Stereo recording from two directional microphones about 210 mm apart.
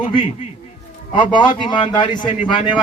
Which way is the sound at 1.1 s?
20° left (ahead or behind).